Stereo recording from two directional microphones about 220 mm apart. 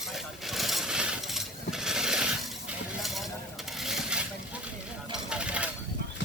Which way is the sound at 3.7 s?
Centre (ahead or behind).